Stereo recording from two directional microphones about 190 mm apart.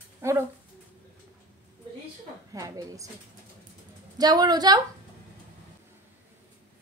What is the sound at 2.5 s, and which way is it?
Speech, 15° right (ahead or behind).